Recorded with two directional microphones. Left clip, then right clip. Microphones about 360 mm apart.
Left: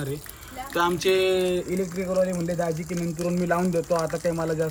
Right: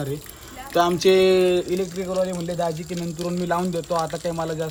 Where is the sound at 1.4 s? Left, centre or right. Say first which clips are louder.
Right 6 dB; right.